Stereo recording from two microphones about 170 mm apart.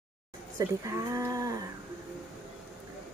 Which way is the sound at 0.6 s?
20° right (ahead or behind).